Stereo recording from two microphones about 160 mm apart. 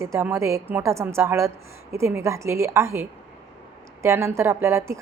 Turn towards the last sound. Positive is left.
turn(degrees=-15)  # may be behind; listen again after turning